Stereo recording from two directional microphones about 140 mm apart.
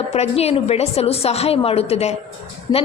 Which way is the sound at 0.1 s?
50° left (ahead or behind).